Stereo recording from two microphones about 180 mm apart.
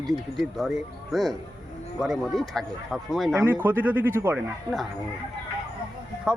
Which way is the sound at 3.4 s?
10° right (ahead or behind).